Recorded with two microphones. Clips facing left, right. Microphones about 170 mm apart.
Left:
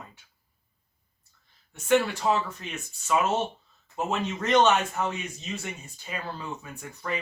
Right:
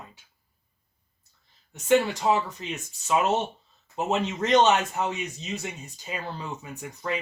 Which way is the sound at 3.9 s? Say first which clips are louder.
Right 2 dB; 20° right (ahead or behind).